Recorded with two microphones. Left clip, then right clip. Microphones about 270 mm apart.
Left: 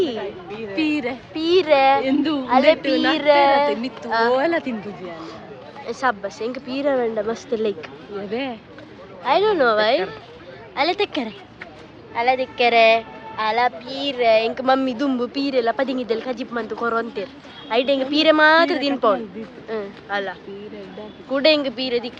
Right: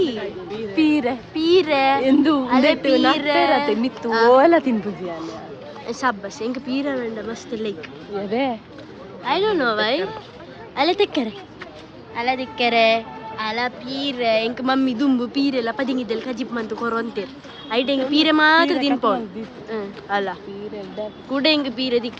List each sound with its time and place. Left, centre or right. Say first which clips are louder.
0.8 s a sound: right 4 dB; right
1.3 s speech: left 1 dB; centre
2.0 s a woman's voice: right 4 dB; right
2.5 s speech: left 5 dB; centre
3.8 s speech: right 2 dB; right
5.8 s speech: left 1 dB; centre
8.3 s a woman's voice: right 5 dB; right
9.2 s speech: left 3 dB; centre
21.3 s speech: left 2 dB; centre